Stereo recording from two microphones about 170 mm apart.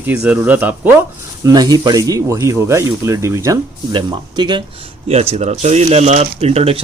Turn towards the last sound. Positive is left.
turn(degrees=-35)  # may be behind; listen again after turning